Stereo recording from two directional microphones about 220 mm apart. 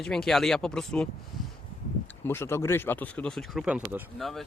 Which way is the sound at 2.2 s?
10° left (ahead or behind).